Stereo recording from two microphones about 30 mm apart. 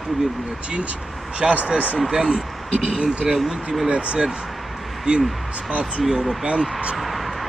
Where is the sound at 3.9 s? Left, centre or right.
Right.